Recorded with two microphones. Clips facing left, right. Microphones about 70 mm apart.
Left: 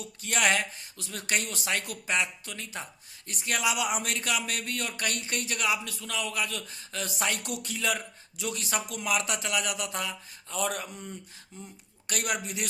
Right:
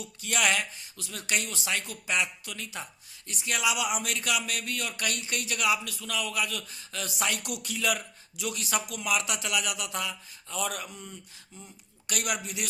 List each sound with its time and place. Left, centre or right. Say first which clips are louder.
0.0 s speech: left 1 dB; left
12.0 s speech: left 1 dB; left